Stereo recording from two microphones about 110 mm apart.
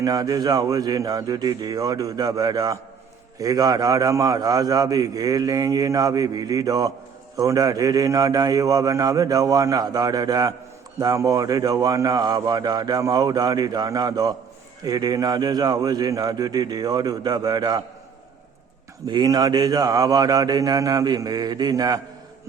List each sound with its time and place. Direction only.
0.0 s a man's voice: 35° right (ahead or behind)
19.0 s a man's voice: 40° right (ahead or behind)